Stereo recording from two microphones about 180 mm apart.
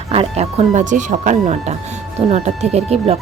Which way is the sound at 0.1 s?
35° right (ahead or behind).